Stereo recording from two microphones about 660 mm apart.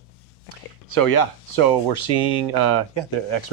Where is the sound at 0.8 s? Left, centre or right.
Left.